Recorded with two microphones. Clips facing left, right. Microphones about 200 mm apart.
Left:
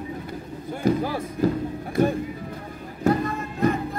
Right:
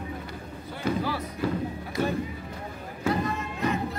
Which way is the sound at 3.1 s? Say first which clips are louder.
Left 5 dB; 55° left (ahead or behind).